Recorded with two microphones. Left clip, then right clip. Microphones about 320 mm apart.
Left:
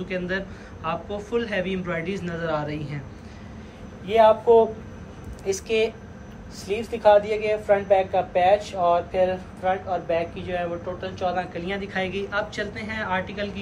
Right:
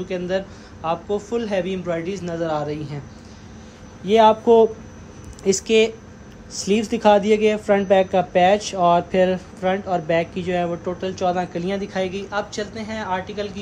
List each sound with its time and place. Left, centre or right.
0.1 s a man's voice: centre
4.0 s speech: right